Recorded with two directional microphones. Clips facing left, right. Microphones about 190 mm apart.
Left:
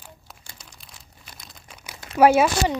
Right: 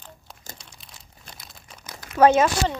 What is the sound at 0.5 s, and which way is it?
Crumpling, centre (ahead or behind).